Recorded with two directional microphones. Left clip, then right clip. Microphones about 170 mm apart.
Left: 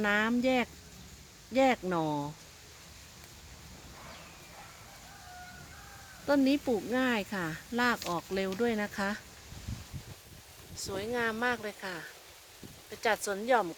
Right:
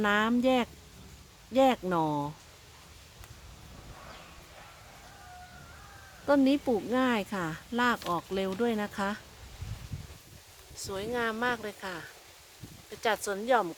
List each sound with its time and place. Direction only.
0.0 s speech: 15° right (ahead or behind)
6.2 s speech: 15° right (ahead or behind)
10.8 s speech: 5° right (ahead or behind)